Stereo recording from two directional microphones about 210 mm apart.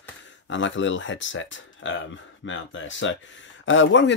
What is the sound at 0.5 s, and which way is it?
Speech, 65° left (ahead or behind).